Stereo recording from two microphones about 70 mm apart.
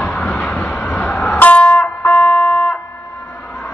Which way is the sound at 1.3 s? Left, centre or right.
Left.